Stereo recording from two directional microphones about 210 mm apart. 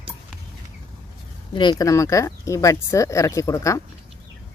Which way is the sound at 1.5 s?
20° left (ahead or behind).